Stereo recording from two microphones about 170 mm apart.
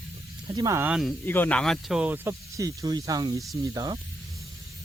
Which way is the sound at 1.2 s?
10° left (ahead or behind).